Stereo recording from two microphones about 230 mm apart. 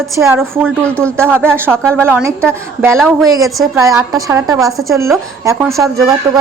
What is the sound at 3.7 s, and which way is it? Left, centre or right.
A woman's voice, centre.